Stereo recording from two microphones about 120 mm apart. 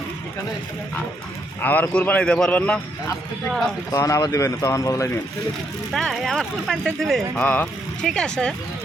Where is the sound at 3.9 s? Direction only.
25° left (ahead or behind).